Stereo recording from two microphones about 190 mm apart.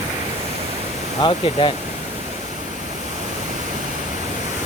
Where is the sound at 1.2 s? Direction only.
25° left (ahead or behind).